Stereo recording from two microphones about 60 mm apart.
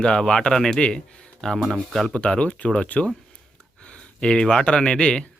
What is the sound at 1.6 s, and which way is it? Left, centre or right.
Speech, centre.